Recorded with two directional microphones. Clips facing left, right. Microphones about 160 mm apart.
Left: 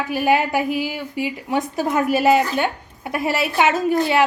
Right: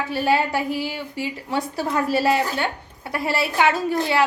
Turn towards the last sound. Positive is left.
turn(degrees=20)  # may be behind; listen again after turning